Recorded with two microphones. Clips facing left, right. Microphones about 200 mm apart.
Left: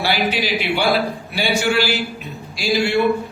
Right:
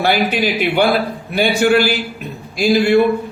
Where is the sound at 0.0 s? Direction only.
50° right (ahead or behind).